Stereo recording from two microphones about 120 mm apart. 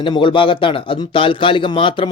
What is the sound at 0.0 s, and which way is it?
A man's voice, 45° left (ahead or behind).